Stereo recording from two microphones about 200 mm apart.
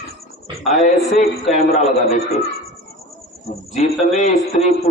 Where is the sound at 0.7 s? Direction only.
35° left (ahead or behind).